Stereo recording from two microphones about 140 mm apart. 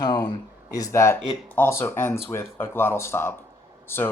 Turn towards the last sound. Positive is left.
turn(degrees=15)  # may be behind; listen again after turning